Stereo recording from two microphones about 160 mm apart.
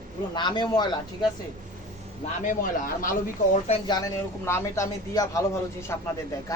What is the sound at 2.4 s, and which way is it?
Speech, 55° left (ahead or behind).